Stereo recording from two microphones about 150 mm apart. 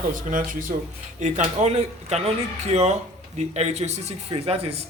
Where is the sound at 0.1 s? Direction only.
60° right (ahead or behind).